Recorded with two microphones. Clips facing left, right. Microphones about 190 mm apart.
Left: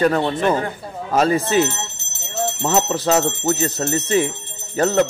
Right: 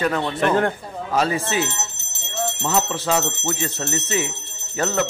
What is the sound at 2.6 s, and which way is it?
Speech, 40° left (ahead or behind).